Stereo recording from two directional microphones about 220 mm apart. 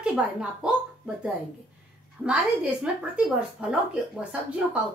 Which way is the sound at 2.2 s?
5° right (ahead or behind).